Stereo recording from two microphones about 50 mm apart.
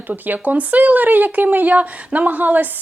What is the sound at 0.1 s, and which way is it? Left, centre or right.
Speech, right.